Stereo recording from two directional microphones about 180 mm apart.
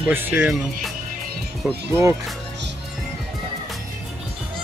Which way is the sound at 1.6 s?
15° right (ahead or behind).